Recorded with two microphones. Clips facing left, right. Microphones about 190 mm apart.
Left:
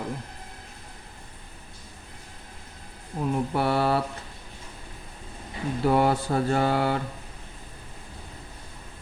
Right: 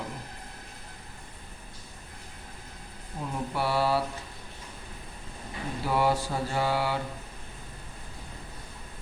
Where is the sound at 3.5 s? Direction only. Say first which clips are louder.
Left 1 dB; 55° left (ahead or behind).